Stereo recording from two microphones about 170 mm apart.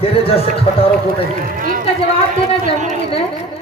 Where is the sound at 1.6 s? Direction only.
55° right (ahead or behind).